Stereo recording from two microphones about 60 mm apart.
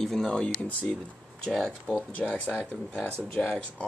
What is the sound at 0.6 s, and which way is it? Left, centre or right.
Speech, left.